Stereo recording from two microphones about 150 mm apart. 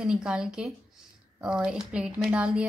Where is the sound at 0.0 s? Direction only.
5° right (ahead or behind).